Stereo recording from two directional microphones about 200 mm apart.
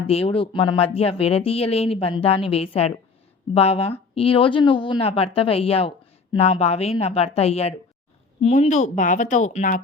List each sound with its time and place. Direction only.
0.1 s a woman's voice: 30° left (ahead or behind)